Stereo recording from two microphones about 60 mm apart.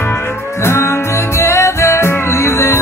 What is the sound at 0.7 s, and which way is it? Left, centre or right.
Music, left.